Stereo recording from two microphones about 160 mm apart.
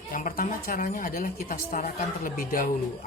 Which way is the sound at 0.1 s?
60° left (ahead or behind).